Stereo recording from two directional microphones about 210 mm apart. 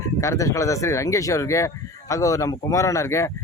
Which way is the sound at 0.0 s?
15° left (ahead or behind).